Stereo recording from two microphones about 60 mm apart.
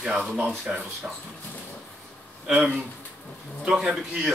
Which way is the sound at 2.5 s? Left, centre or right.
Centre.